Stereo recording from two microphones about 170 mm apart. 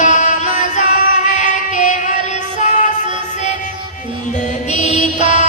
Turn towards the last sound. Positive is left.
turn(degrees=45)  # may be behind; listen again after turning